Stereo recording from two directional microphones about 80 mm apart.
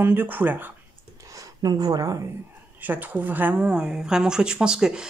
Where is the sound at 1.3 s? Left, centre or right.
Right.